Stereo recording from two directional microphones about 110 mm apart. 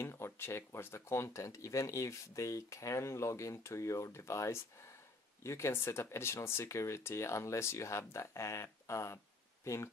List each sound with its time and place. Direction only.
0.0 s speech: 25° left (ahead or behind)